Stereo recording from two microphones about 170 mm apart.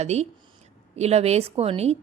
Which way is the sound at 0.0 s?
40° right (ahead or behind).